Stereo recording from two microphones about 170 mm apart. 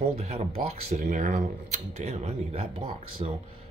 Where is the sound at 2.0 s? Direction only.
40° right (ahead or behind).